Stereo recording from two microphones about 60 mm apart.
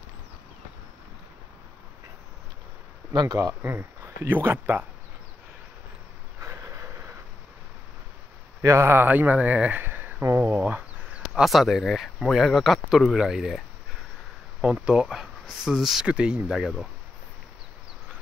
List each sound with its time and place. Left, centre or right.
3.3 s speech: right
3.6 s speech: right
6.4 s a sound: right
8.6 s speech: right
8.9 s speech: right
11.4 s speech: centre
14.6 s speech: centre
16.1 s speech: centre